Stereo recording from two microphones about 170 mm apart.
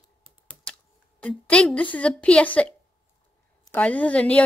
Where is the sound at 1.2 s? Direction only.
5° left (ahead or behind).